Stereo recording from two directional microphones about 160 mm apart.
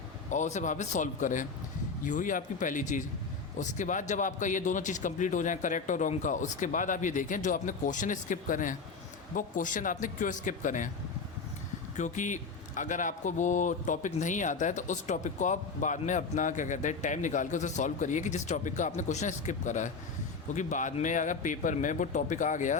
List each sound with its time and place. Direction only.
0.3 s a man's voice: 50° left (ahead or behind)
11.9 s a man's voice: 50° left (ahead or behind)